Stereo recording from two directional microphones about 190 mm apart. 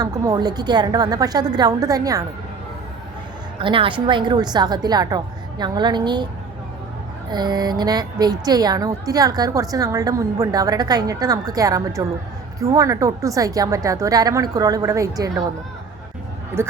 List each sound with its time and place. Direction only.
0.0 s a woman's voice: 20° right (ahead or behind)
3.6 s a woman's voice: 25° right (ahead or behind)
7.3 s a woman's voice: 20° right (ahead or behind)
16.6 s a woman's voice: 15° right (ahead or behind)